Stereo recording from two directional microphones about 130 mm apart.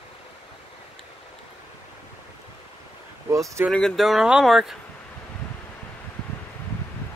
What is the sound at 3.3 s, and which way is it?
Speech, 25° right (ahead or behind).